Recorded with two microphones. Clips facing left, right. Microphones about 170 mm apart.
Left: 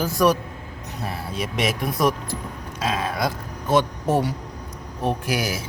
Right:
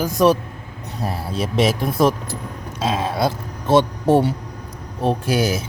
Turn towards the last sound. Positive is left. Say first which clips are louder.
# right 6 dB
turn(degrees=-25)  # may be behind; listen again after turning